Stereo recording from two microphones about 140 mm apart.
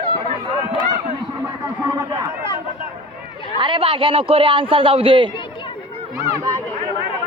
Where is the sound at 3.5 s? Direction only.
35° right (ahead or behind).